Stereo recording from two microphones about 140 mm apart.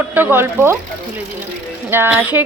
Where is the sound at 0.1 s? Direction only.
15° right (ahead or behind).